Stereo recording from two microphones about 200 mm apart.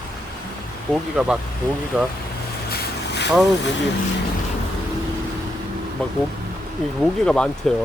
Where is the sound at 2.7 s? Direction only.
55° left (ahead or behind).